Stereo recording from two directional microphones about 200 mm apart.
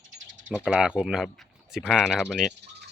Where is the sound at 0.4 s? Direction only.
5° right (ahead or behind).